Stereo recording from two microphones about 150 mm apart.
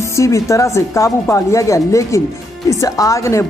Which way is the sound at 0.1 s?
20° left (ahead or behind).